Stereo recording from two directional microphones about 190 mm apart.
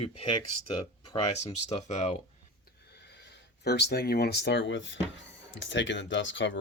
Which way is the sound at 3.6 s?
60° left (ahead or behind).